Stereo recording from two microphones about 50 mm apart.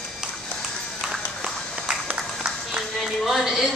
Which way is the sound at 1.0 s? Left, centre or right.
Centre.